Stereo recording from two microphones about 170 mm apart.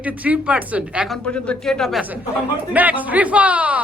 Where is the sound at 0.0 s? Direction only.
10° right (ahead or behind).